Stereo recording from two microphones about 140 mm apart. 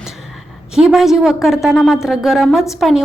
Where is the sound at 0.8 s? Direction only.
5° right (ahead or behind).